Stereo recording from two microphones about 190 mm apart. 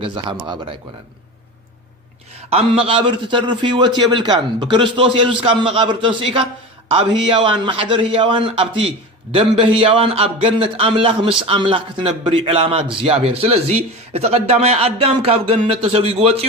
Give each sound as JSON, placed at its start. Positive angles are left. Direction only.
{"t": 0.0, "sound": "a man's voice", "side_deg": -25}
{"t": 2.5, "sound": "a man's voice", "side_deg": -30}